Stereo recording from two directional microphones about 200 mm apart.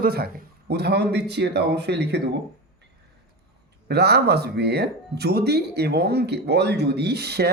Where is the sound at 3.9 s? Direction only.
55° right (ahead or behind).